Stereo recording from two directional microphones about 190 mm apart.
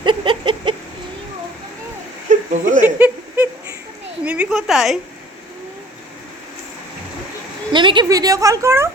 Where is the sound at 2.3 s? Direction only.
40° right (ahead or behind).